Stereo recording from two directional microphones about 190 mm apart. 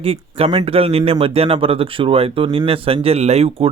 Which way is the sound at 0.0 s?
30° right (ahead or behind).